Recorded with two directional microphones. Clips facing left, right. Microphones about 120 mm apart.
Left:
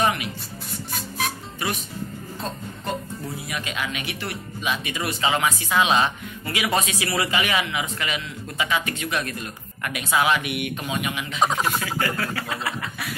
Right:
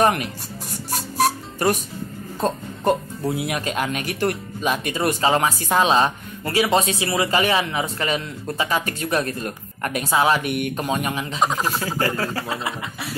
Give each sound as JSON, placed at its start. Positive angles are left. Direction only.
{"t": 0.8, "sound": "music", "side_deg": -40}
{"t": 2.4, "sound": "speech", "side_deg": -60}
{"t": 3.6, "sound": "speech", "side_deg": -45}
{"t": 11.3, "sound": "speech", "side_deg": 0}
{"t": 11.8, "sound": "speech", "side_deg": -35}